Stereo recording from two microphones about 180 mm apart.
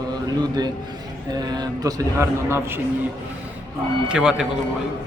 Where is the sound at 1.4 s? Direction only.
20° right (ahead or behind).